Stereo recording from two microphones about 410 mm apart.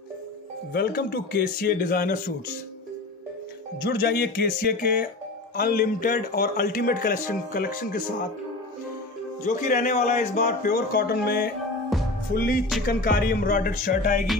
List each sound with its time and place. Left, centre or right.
0.7 s a man's voice: left
3.8 s a man's voice: left
9.6 s a man's voice: centre
11.9 s music: centre
12.4 s a man's voice: left